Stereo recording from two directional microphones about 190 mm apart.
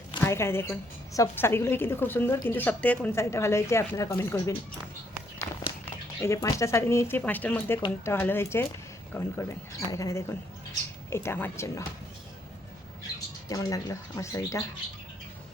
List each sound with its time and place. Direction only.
0.2 s a woman's voice: 15° left (ahead or behind)
13.5 s a woman's voice: 20° left (ahead or behind)